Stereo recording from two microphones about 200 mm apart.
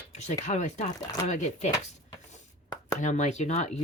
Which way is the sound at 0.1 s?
35° left (ahead or behind).